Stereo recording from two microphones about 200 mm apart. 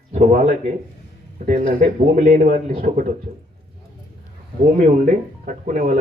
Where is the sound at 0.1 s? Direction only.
35° right (ahead or behind).